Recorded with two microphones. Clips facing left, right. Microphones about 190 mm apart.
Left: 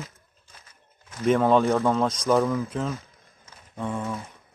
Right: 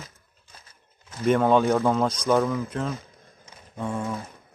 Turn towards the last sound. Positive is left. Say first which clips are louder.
# right 1 dB
turn(degrees=0)  # may be behind; listen again after turning